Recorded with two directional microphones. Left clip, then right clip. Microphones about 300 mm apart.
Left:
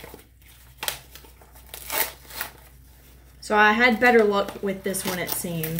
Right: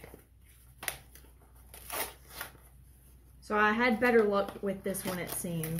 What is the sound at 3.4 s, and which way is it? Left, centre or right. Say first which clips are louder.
Speech: left 10 dB; centre.